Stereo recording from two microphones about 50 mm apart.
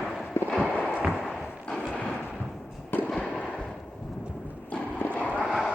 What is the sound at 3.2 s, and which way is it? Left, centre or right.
Fireworks, left.